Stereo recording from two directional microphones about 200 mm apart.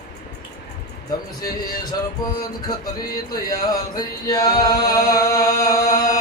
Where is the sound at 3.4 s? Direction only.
20° left (ahead or behind).